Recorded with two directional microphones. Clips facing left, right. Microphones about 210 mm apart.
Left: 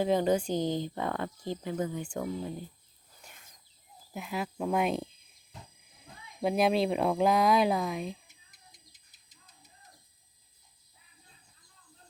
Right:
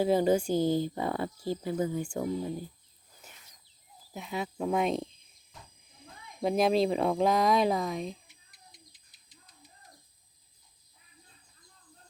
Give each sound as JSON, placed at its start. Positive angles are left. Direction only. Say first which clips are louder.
{"t": 0.0, "sound": "speech", "louder": "right 2 dB", "side_deg": -10}
{"t": 4.1, "sound": "speech", "louder": "even", "side_deg": 0}
{"t": 6.4, "sound": "speech", "louder": "right 1 dB", "side_deg": 0}